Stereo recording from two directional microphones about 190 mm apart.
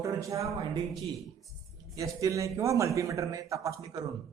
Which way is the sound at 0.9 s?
Centre (ahead or behind).